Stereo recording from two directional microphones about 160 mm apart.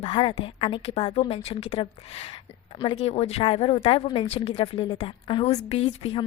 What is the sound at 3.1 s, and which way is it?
A woman's voice, 40° left (ahead or behind).